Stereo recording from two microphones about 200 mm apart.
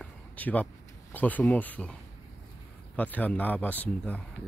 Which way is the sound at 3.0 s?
10° left (ahead or behind).